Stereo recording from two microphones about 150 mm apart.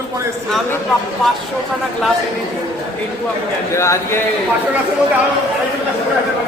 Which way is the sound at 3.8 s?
20° left (ahead or behind).